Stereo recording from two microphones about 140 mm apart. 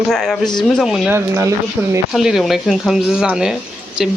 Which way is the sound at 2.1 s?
Centre (ahead or behind).